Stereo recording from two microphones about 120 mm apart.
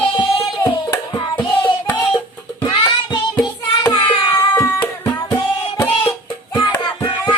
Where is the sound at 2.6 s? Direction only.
35° left (ahead or behind).